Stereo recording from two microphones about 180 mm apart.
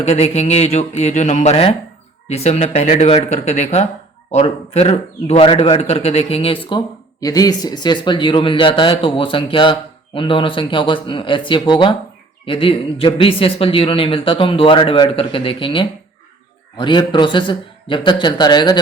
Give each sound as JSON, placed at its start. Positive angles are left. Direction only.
{"t": 0.0, "sound": "a man's voice", "side_deg": 35}